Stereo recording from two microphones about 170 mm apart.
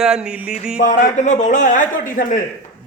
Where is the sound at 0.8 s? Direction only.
50° left (ahead or behind).